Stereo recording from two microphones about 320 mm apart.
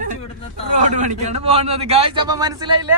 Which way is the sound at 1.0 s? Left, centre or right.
Centre.